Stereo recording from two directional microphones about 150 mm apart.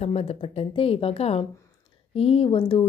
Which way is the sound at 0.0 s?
45° left (ahead or behind).